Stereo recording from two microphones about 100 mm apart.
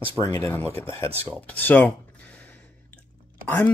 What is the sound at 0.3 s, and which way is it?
Speech, 25° left (ahead or behind).